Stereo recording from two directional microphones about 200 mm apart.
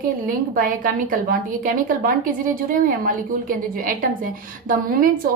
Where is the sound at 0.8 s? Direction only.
45° right (ahead or behind).